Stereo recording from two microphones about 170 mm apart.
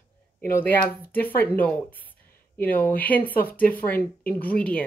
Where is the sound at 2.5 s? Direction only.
10° left (ahead or behind).